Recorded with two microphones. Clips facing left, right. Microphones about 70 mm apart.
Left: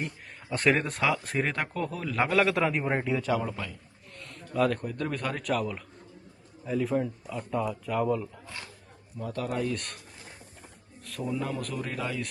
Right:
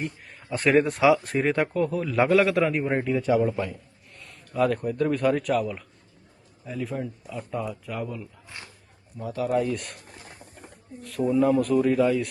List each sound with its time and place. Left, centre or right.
0.5 s speech: centre
3.5 s a man's voice: right
4.2 s a man's voice: centre
8.4 s roaring cats: right
9.1 s speech: centre
11.3 s speech: centre